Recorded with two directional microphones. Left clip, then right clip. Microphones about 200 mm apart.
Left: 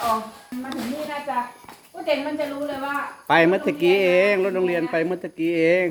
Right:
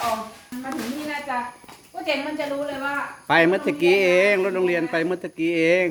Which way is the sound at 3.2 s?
Centre (ahead or behind).